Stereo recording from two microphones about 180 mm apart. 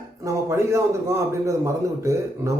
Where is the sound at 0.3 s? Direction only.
15° right (ahead or behind).